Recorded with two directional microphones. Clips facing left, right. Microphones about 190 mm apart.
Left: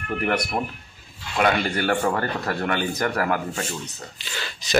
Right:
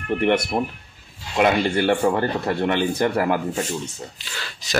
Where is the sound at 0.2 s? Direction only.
25° right (ahead or behind).